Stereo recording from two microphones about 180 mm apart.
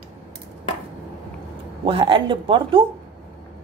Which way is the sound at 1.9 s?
30° right (ahead or behind).